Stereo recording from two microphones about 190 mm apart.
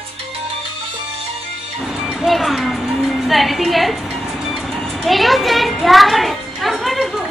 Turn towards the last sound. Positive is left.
turn(degrees=0)  # may be behind; listen again after turning